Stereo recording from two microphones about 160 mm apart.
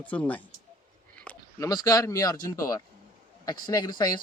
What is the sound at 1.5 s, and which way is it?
A man's voice, 25° left (ahead or behind).